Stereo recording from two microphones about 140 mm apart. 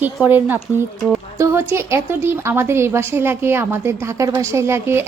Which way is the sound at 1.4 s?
20° right (ahead or behind).